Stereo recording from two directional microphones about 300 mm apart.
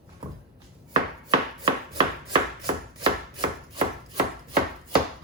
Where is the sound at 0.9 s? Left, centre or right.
Centre.